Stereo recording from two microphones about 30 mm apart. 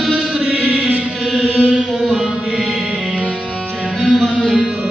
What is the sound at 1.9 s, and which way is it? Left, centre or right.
Music, centre.